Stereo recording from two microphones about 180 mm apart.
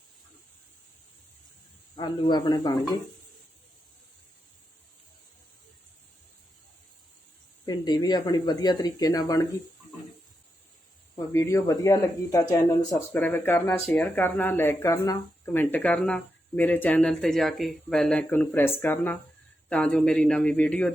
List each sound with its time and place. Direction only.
2.0 s speech: 25° left (ahead or behind)
7.6 s speech: 25° left (ahead or behind)
11.3 s speech: 15° left (ahead or behind)
13.1 s speech: 10° left (ahead or behind)
15.4 s speech: 10° left (ahead or behind)